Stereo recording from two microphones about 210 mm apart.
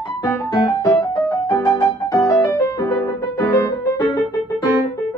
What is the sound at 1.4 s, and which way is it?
Music, 15° left (ahead or behind).